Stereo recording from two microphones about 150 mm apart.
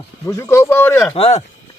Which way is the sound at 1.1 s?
40° left (ahead or behind).